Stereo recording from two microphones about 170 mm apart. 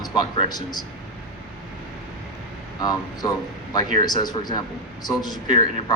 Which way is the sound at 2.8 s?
20° left (ahead or behind).